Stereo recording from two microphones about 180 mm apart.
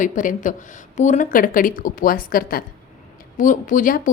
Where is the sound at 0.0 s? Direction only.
45° left (ahead or behind).